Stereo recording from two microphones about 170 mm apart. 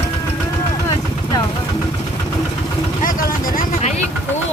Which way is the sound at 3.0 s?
55° left (ahead or behind).